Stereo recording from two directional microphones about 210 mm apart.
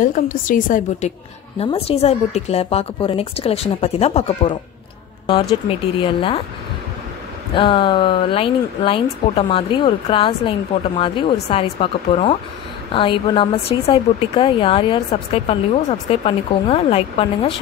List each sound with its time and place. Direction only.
0.0 s a woman's voice: 40° left (ahead or behind)
1.6 s a woman's voice: 30° left (ahead or behind)
5.7 s a woman's voice: 25° left (ahead or behind)
7.5 s a woman's voice: 25° left (ahead or behind)